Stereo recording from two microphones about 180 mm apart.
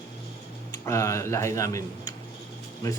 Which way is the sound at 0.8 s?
15° left (ahead or behind).